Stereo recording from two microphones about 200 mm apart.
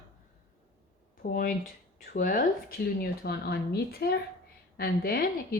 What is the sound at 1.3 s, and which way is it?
A woman's voice, 45° left (ahead or behind).